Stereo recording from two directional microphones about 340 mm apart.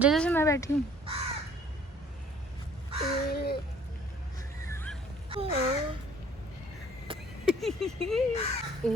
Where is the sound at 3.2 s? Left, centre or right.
Left.